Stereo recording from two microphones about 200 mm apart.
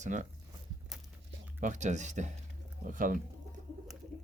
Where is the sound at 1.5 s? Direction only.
40° right (ahead or behind).